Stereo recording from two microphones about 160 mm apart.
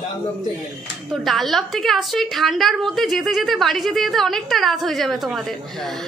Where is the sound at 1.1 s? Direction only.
Centre (ahead or behind).